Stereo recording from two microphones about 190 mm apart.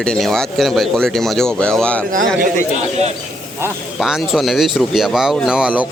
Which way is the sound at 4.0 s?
Centre (ahead or behind).